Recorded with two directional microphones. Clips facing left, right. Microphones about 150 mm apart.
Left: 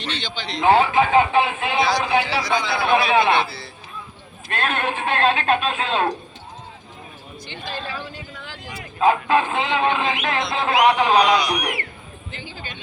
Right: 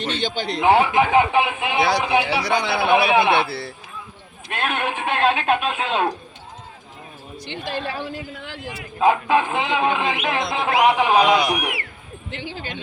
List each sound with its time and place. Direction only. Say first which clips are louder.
0.1 s speech: right 4 dB; 45° right (ahead or behind)
0.6 s a man's voice: even; 15° right (ahead or behind)
2.2 s speech: right 1 dB; 65° right (ahead or behind)
2.8 s a man's voice: right 1 dB; 15° right (ahead or behind)
3.4 s speech: right 3 dB; 65° right (ahead or behind)
4.4 s a man's voice: left 1 dB; 15° right (ahead or behind)
7.3 s speech: right 4 dB; 70° right (ahead or behind)
9.0 s a man's voice: even; 15° right (ahead or behind)
10.8 s a man's voice: even; 5° right (ahead or behind)
12.3 s speech: right 6 dB; 75° right (ahead or behind)